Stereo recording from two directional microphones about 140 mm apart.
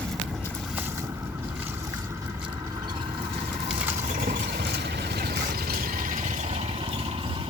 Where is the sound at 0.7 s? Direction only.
15° right (ahead or behind).